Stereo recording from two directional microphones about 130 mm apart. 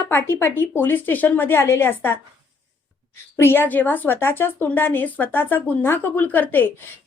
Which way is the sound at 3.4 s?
15° left (ahead or behind).